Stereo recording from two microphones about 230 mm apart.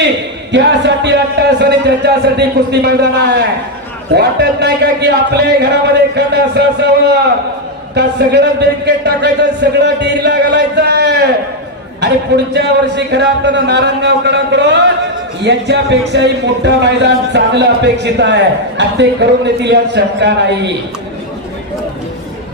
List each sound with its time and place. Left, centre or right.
0.5 s a man's voice: right